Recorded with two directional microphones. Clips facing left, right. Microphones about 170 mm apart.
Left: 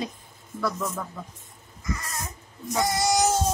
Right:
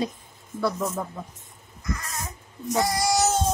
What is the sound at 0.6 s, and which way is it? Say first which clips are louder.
Speech: right 3 dB; 25° right (ahead or behind).